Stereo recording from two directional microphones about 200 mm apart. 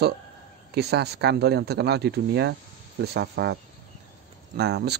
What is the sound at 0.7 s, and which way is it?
Speech, 55° right (ahead or behind).